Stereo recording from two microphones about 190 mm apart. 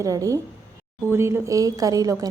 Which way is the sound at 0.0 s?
15° right (ahead or behind).